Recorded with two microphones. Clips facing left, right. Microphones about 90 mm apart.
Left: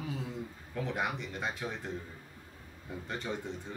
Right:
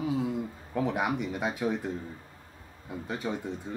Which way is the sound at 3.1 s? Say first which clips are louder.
Right 5 dB; 10° right (ahead or behind).